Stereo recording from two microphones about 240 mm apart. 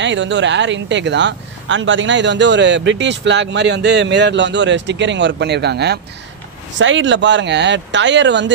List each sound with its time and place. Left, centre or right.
0.0 s speech: right